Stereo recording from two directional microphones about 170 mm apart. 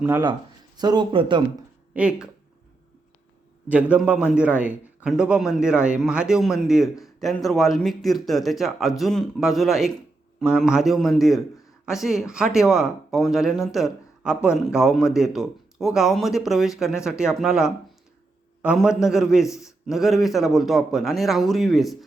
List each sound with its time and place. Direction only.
0.0 s speech: 10° right (ahead or behind)
0.8 s speech: 25° right (ahead or behind)
1.9 s speech: 5° right (ahead or behind)
3.7 s speech: 10° right (ahead or behind)